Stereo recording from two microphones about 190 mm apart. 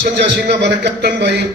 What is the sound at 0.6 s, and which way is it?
Speech, 65° right (ahead or behind).